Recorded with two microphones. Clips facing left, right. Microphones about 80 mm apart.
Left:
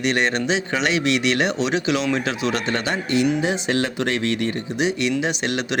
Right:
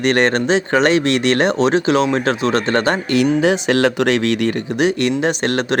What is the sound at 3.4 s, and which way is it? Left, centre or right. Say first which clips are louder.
Speech: right 7 dB; right.